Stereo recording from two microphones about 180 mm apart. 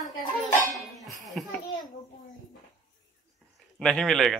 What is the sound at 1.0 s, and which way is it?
Speech, centre (ahead or behind).